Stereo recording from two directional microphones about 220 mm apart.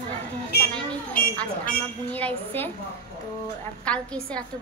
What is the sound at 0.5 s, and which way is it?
Speech, 45° left (ahead or behind).